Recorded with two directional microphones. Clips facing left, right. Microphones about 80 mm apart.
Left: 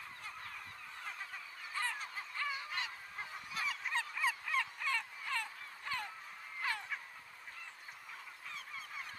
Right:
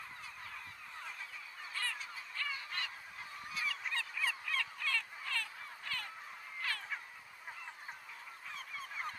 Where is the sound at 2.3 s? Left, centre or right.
Centre.